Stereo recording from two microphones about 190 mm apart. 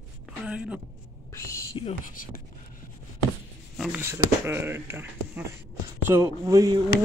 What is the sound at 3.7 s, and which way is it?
Speech, 10° right (ahead or behind).